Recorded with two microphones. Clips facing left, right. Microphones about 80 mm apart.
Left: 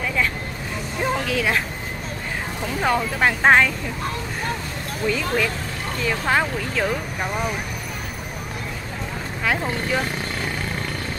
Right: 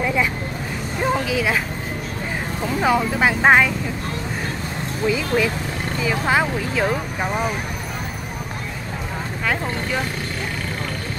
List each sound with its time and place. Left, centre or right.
0.0 s speech: centre
1.1 s speech: centre
2.8 s speech: centre
5.0 s speech: centre